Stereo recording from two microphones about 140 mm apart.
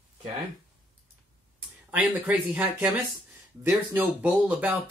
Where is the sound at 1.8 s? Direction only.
10° right (ahead or behind).